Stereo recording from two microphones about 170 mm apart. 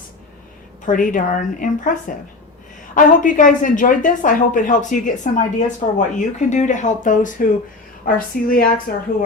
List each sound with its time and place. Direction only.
0.9 s a woman's voice: 50° left (ahead or behind)